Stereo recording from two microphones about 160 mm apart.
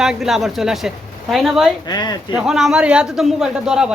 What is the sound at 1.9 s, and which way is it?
Speech, 25° left (ahead or behind).